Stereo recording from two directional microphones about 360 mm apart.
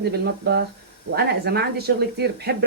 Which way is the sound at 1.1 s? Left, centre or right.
Right.